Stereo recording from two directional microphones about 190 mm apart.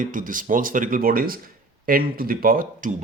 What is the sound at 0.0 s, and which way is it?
Speech, 45° right (ahead or behind).